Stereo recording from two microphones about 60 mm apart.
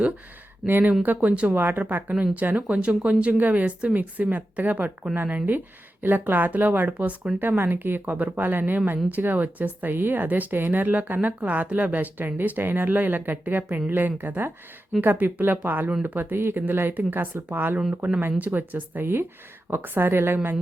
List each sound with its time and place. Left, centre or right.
0.6 s speech: centre
1.0 s speech: right
1.5 s speech: right
16.3 s speech: right